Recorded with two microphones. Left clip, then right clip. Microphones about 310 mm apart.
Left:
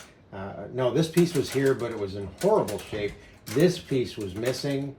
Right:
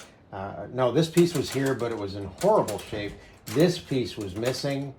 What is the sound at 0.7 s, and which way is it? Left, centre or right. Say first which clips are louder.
Speech: right 2 dB; centre.